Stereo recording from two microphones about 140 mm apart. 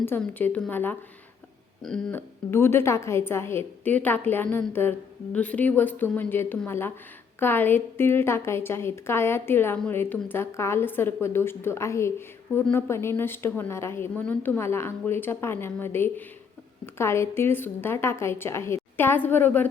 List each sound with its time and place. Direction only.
0.2 s a woman's voice: 10° left (ahead or behind)
1.8 s a sound: 5° left (ahead or behind)
2.1 s a woman's voice: 15° left (ahead or behind)